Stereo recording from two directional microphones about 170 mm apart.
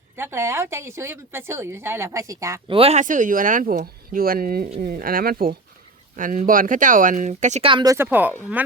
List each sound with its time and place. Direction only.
0.2 s a woman's voice: 15° right (ahead or behind)
2.6 s speech: 35° right (ahead or behind)
7.7 s speech: 25° right (ahead or behind)
7.9 s a woman's voice: 10° right (ahead or behind)